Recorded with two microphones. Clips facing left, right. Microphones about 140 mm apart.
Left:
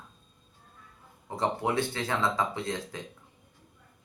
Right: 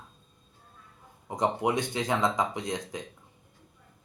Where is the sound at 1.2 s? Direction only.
15° right (ahead or behind).